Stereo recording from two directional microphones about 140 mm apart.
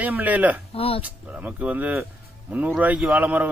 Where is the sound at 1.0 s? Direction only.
10° right (ahead or behind).